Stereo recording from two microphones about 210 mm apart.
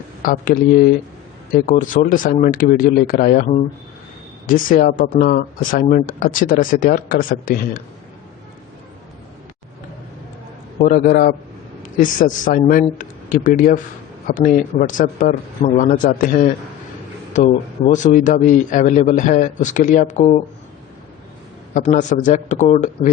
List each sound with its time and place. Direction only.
0.2 s speech: 40° left (ahead or behind)
10.8 s a man's voice: 45° left (ahead or behind)
21.7 s speech: 35° left (ahead or behind)